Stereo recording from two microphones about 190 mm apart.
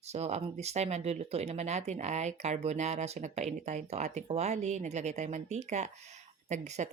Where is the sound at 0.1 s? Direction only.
35° right (ahead or behind).